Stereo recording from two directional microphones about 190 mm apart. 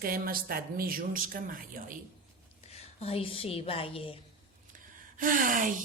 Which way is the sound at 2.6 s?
30° left (ahead or behind).